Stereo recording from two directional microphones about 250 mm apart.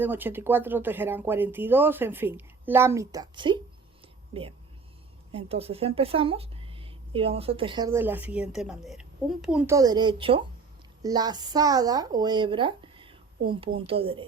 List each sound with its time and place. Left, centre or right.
0.0 s speech: centre
4.0 s whispering: right
5.3 s speech: right